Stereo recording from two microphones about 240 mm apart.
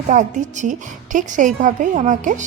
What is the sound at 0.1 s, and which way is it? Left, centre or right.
A woman's voice, right.